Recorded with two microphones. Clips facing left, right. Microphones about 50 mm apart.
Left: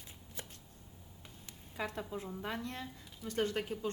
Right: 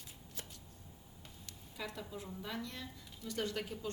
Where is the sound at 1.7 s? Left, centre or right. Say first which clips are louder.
Left 5 dB; left.